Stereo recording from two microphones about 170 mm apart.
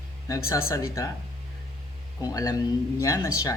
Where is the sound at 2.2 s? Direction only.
20° left (ahead or behind).